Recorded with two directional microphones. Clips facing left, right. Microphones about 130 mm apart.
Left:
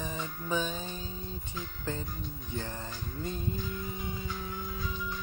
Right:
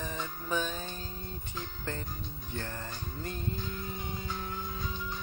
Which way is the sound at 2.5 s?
15° left (ahead or behind).